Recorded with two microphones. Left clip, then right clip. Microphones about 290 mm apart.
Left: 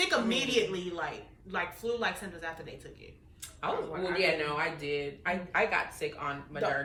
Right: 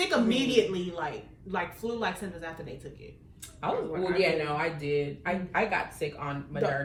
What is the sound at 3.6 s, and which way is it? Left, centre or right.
A woman's voice, centre.